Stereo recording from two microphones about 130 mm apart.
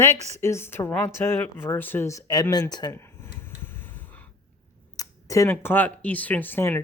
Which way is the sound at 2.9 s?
15° left (ahead or behind).